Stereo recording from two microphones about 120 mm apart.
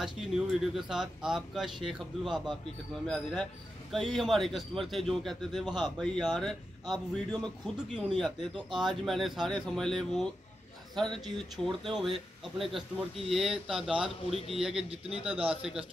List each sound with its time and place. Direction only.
0.0 s a man's voice: 5° right (ahead or behind)
5.7 s a man's voice: 35° right (ahead or behind)
5.9 s a man's voice: 5° left (ahead or behind)